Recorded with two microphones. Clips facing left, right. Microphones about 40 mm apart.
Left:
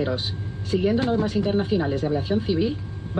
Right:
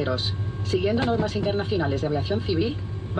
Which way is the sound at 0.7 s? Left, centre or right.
Centre.